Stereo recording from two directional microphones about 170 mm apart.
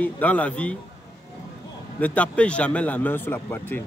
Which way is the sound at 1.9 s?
10° left (ahead or behind).